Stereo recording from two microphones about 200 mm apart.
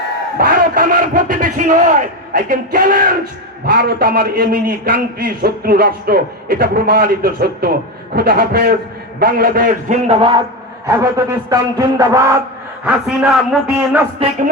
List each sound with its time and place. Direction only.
0.3 s a man's voice: 50° right (ahead or behind); by 10.4 s 25° right (ahead or behind)
10.8 s a man's voice: 15° right (ahead or behind)